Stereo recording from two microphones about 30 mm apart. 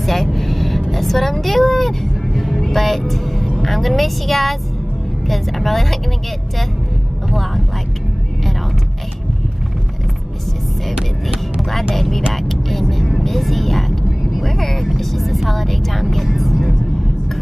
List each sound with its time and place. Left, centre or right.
0.0 s vehicle: centre
1.4 s speech: centre
7.2 s speech: centre
11.0 s music: centre
11.9 s speech: centre
12.4 s vehicle: centre